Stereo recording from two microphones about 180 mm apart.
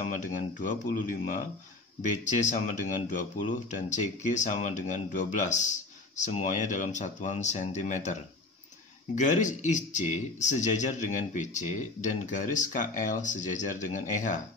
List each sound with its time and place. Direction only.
0.0 s speech: 40° left (ahead or behind)